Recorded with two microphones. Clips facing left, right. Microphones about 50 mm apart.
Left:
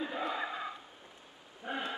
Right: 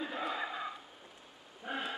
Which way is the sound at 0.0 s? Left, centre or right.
Centre.